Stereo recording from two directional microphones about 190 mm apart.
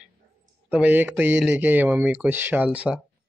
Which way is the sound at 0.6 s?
10° right (ahead or behind).